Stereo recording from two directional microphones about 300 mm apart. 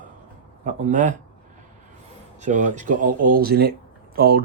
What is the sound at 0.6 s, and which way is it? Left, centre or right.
Speech, right.